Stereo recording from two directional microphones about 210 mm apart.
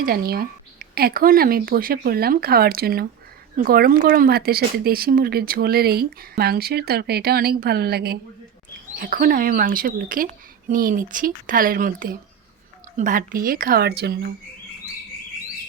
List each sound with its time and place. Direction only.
0.0 s speech: 45° right (ahead or behind)